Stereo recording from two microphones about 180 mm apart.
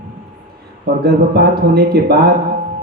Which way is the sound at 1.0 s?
60° right (ahead or behind).